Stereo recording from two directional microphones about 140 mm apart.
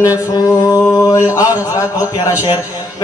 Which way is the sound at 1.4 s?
20° left (ahead or behind).